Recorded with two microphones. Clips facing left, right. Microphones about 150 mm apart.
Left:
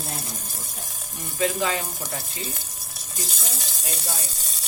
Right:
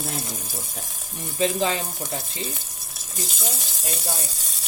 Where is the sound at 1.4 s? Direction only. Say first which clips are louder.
Right 2 dB; 25° right (ahead or behind).